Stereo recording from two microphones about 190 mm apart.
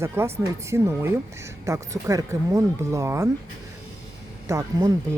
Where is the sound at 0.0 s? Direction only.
15° right (ahead or behind).